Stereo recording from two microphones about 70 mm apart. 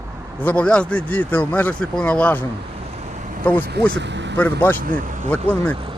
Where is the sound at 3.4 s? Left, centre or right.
Left.